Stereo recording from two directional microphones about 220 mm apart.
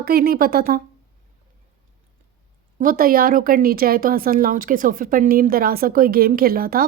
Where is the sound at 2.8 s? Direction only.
40° right (ahead or behind).